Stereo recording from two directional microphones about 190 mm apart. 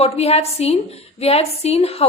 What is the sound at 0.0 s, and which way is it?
A woman's voice, 30° left (ahead or behind).